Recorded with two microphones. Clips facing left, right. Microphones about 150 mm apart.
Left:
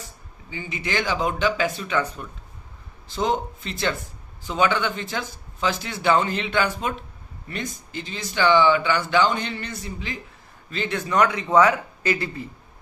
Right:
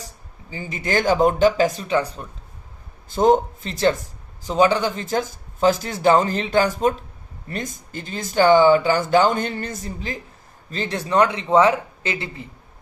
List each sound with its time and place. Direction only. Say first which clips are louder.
0.5 s speech: right 4 dB; 40° right (ahead or behind)
3.2 s speech: right 8 dB; 45° right (ahead or behind); by 12.5 s 20° right (ahead or behind)